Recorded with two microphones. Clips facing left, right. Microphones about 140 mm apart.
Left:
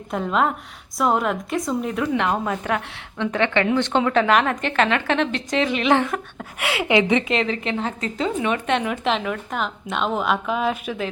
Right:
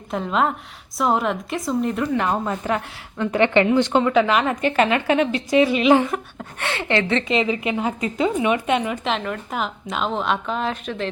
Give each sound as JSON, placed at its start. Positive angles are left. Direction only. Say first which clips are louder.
{"t": 0.1, "sound": "speech", "louder": "even", "side_deg": 0}
{"t": 3.4, "sound": "a woman's voice", "louder": "right 4 dB", "side_deg": -15}
{"t": 6.6, "sound": "a woman's voice", "louder": "left 3 dB", "side_deg": 10}
{"t": 7.3, "sound": "speech", "louder": "right 2 dB", "side_deg": -5}